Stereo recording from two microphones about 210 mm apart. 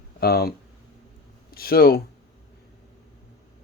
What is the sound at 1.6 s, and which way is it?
Speech, 45° left (ahead or behind).